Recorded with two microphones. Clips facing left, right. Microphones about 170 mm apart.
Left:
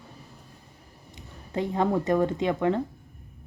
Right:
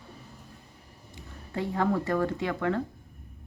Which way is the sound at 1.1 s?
20° left (ahead or behind).